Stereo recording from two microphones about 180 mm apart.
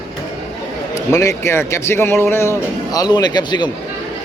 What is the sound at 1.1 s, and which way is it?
A man's voice, 15° left (ahead or behind).